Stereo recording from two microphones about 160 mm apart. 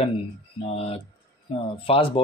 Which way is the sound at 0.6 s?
40° left (ahead or behind).